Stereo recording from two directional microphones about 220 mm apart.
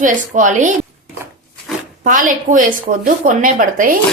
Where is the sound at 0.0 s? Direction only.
35° right (ahead or behind).